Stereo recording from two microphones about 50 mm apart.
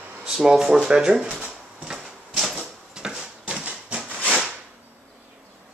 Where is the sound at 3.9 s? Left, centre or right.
Right.